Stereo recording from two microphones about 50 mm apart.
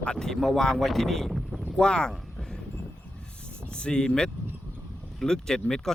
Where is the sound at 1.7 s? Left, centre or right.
Centre.